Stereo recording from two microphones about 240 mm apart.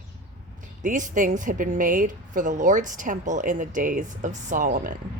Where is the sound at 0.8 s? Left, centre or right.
Right.